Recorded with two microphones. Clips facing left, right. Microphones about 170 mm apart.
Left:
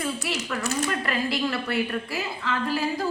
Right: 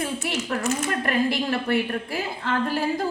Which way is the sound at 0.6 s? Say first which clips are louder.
Even; 35° left (ahead or behind).